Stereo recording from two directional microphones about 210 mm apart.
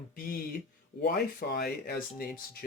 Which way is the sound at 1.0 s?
45° left (ahead or behind).